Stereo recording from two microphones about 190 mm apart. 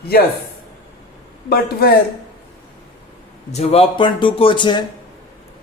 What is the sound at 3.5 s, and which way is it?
A man's voice, 35° left (ahead or behind).